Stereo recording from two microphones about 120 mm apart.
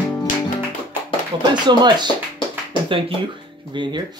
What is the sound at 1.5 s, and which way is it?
Speech, 40° right (ahead or behind).